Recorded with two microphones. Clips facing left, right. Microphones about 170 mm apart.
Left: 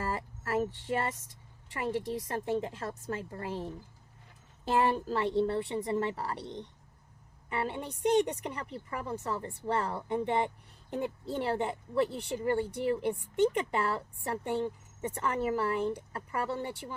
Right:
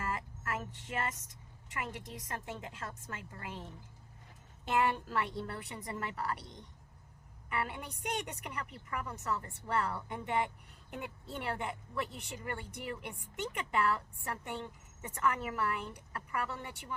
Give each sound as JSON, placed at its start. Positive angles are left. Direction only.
{"t": 0.0, "sound": "a woman's voice", "side_deg": 35}